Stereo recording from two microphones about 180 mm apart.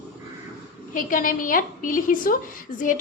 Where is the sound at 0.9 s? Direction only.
50° left (ahead or behind).